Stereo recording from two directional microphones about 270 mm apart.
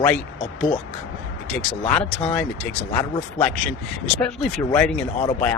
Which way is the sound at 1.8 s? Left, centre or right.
Left.